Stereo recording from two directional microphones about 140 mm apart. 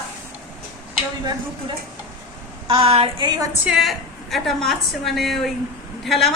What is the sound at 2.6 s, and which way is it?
Speech, 40° right (ahead or behind).